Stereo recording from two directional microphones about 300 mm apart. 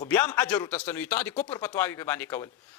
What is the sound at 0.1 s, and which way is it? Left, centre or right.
A man's voice, centre.